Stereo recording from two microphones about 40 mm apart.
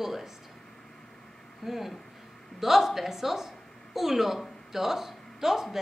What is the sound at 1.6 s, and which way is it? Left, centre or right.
A woman's voice, centre.